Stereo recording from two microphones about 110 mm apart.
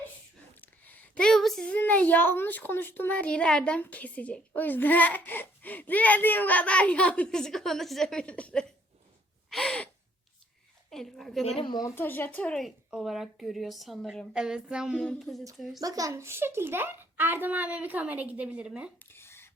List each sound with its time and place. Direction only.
0.6 s a woman's voice: 15° left (ahead or behind)
9.5 s gasp: 5° left (ahead or behind)
10.9 s speech: centre (ahead or behind)
11.6 s a woman's voice: 40° left (ahead or behind)
11.9 s a woman's voice: 20° left (ahead or behind); by 15.8 s centre (ahead or behind)
15.8 s a child's voice: 35° right (ahead or behind); by 18.9 s 5° right (ahead or behind)
19.0 s a sound: 20° left (ahead or behind)